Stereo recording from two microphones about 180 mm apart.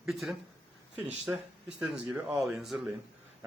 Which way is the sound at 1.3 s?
15° right (ahead or behind).